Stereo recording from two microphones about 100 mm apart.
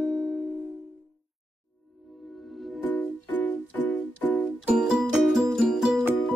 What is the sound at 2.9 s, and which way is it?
Music, 10° left (ahead or behind).